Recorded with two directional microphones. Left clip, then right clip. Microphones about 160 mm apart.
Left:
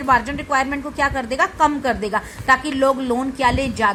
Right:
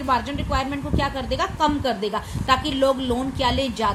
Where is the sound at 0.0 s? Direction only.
20° left (ahead or behind).